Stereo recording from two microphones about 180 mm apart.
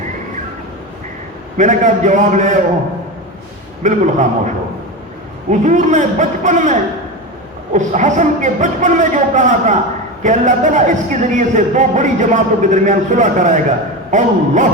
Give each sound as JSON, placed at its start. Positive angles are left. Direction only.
{"t": 1.5, "sound": "speech", "side_deg": -45}
{"t": 3.8, "sound": "speech", "side_deg": -40}